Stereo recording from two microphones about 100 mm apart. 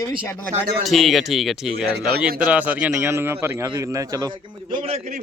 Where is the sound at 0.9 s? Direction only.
Centre (ahead or behind); by 3.1 s 15° right (ahead or behind).